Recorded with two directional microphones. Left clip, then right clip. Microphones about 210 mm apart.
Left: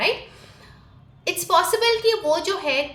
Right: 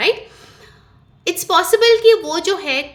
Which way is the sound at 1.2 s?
45° right (ahead or behind).